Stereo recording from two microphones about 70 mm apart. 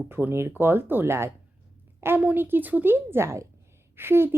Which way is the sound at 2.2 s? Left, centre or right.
Centre.